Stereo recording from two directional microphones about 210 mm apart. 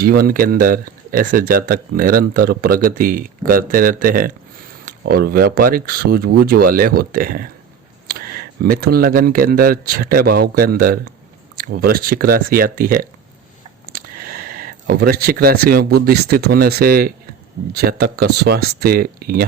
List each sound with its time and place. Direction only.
0.0 s speech: 45° right (ahead or behind)